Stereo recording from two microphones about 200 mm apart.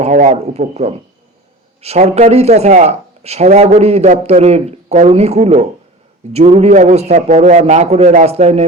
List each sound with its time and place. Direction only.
0.0 s speech: 35° right (ahead or behind)